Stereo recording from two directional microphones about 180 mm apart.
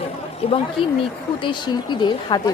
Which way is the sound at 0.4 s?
30° left (ahead or behind).